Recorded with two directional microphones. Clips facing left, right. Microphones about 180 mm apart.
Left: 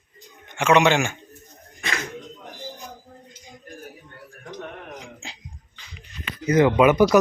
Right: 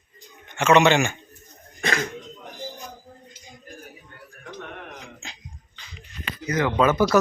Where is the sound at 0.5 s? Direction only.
10° left (ahead or behind).